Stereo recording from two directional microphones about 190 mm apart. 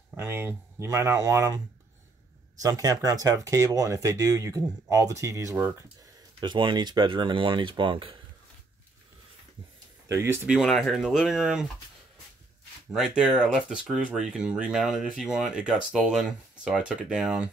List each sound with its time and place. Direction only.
0.1 s speech: 10° right (ahead or behind)
2.6 s speech: 20° right (ahead or behind)
10.0 s speech: 15° right (ahead or behind)
12.9 s speech: 5° right (ahead or behind)